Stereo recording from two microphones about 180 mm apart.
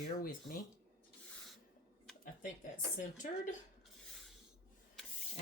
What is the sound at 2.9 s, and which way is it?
Speech, 45° left (ahead or behind).